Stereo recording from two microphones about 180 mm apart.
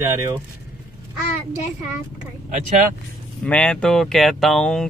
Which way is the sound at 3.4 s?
5° left (ahead or behind).